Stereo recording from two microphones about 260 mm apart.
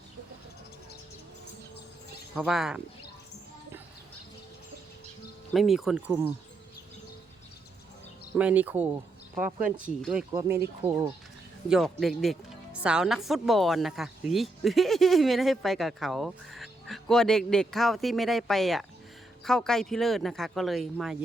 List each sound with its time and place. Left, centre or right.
2.3 s speech: centre
5.5 s speech: centre
8.4 s speech: centre
11.7 s speech: centre